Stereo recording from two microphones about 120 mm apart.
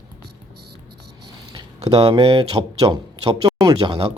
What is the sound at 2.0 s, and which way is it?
Speech, 50° right (ahead or behind).